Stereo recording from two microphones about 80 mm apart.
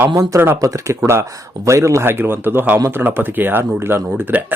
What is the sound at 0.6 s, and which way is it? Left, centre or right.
Speech, right.